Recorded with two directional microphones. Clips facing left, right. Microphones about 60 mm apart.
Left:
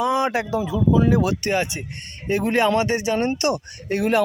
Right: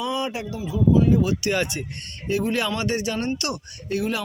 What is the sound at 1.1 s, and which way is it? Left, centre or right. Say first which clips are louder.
Speech: left 1 dB; left.